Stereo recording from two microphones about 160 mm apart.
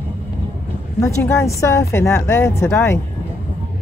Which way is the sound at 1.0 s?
20° left (ahead or behind).